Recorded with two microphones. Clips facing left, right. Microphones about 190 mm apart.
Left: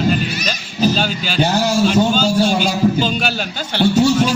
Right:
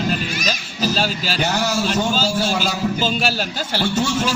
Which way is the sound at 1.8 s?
Centre (ahead or behind).